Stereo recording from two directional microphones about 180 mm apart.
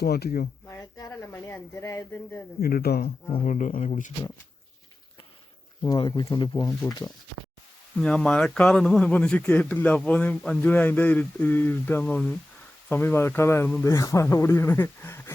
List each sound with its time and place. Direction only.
0.0 s speech: 60° left (ahead or behind)
0.7 s a sound: 20° left (ahead or behind)
2.6 s speech: 55° left (ahead or behind)
3.4 s speech: 45° left (ahead or behind)
5.8 s speech: 25° left (ahead or behind)
7.9 s a man's voice: 5° left (ahead or behind)